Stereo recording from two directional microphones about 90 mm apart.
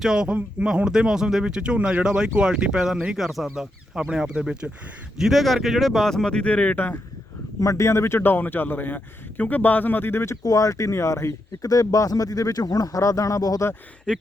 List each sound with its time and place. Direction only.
0.0 s speech: 10° right (ahead or behind); by 7.0 s 20° left (ahead or behind)
7.6 s speech: 35° left (ahead or behind)
10.4 s speech: 40° left (ahead or behind)